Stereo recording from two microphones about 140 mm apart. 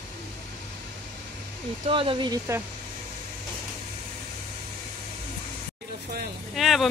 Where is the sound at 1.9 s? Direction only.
35° right (ahead or behind).